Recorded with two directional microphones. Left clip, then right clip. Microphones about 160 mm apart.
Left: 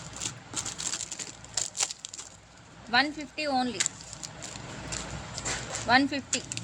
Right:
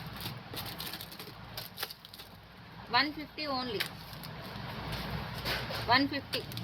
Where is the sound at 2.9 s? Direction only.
90° left.